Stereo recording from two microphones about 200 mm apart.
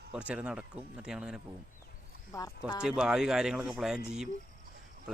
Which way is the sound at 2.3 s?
20° left (ahead or behind).